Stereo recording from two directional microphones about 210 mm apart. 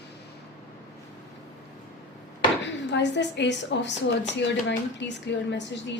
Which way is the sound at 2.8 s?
55° left (ahead or behind).